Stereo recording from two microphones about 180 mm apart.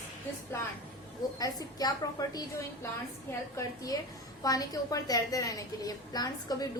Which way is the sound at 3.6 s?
20° left (ahead or behind).